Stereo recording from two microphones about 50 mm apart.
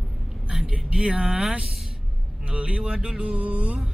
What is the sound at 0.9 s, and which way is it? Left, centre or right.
Speech, centre.